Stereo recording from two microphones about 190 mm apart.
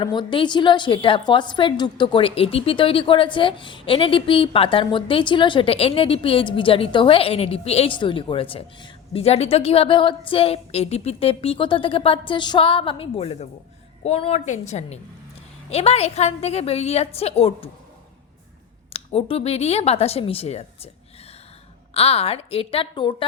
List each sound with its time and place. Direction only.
0.0 s a woman's voice: 25° left (ahead or behind)
18.9 s a woman's voice: 30° left (ahead or behind)
21.9 s a woman's voice: 30° left (ahead or behind)